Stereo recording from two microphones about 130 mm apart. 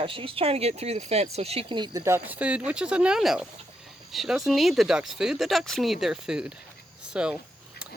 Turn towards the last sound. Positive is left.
turn(degrees=-5)  # may be behind; listen again after turning